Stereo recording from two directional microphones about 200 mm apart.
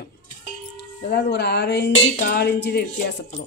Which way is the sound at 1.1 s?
55° left (ahead or behind).